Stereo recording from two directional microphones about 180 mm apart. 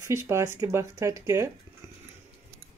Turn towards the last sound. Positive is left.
turn(degrees=-15)  # may be behind; listen again after turning